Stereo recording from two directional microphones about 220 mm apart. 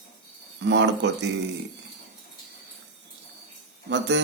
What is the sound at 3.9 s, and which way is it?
Speech, 50° right (ahead or behind).